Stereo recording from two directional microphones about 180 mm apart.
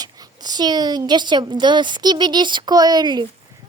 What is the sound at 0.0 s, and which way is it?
A woman's voice, 20° right (ahead or behind).